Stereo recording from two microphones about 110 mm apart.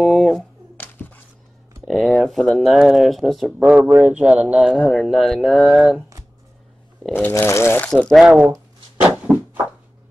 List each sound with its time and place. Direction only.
0.0 s speech: centre (ahead or behind)
0.7 s a sound: 15° left (ahead or behind)
1.8 s speech: centre (ahead or behind)
4.7 s speech: centre (ahead or behind)
7.0 s speech: 10° left (ahead or behind)
8.2 s speech: 10° right (ahead or behind)
9.3 s a sound: 10° right (ahead or behind)